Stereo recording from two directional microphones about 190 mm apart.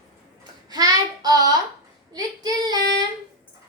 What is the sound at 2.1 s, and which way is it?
Speech, 20° right (ahead or behind).